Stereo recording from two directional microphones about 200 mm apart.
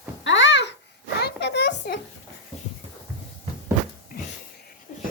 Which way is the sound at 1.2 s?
55° left (ahead or behind).